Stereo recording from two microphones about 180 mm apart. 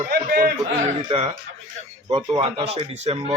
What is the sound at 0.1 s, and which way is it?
Speech, 55° right (ahead or behind).